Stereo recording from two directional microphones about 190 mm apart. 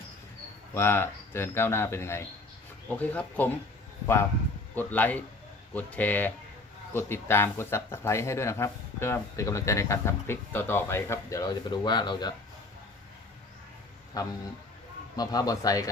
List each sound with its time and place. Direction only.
0.7 s speech: 10° left (ahead or behind)
14.2 s a man's voice: 20° left (ahead or behind)